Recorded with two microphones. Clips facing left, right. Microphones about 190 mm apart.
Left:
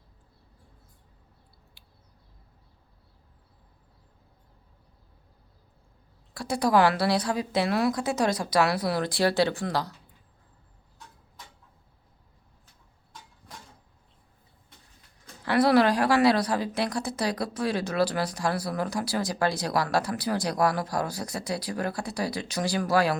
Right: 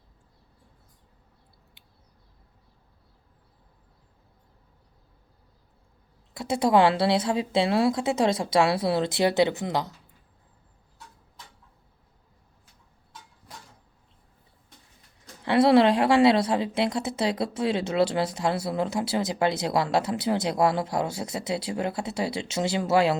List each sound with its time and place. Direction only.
1.8 s a sound: 20° right (ahead or behind)
6.3 s a woman's voice: 20° right (ahead or behind)
15.4 s a woman's voice: 25° right (ahead or behind)